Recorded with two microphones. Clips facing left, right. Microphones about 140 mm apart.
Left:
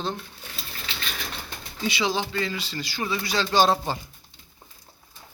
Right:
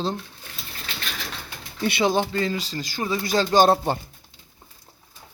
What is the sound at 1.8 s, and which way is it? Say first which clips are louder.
A man's voice: right 5 dB; 55° right (ahead or behind).